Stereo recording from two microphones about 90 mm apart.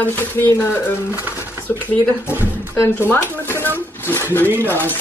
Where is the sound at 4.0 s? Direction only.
25° left (ahead or behind).